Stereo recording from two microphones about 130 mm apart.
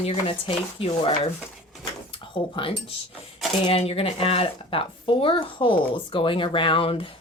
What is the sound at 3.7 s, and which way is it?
Speech, 50° left (ahead or behind).